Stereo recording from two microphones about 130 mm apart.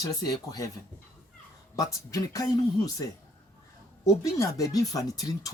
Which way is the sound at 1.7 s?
25° left (ahead or behind).